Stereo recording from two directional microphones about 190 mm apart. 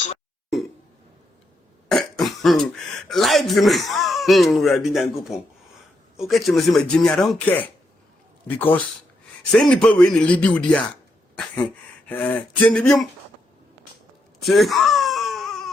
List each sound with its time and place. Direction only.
1.9 s cough: centre (ahead or behind)
3.1 s speech: centre (ahead or behind)
12.0 s speech: 10° left (ahead or behind)
14.4 s wail: centre (ahead or behind)